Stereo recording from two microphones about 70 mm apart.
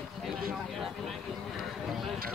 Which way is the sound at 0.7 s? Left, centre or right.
Centre.